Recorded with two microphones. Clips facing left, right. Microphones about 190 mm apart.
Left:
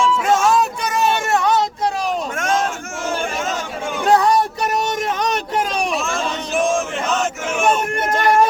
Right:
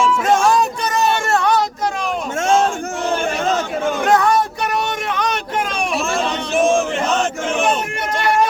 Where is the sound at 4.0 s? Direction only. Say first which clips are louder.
Left 2 dB; 35° left (ahead or behind).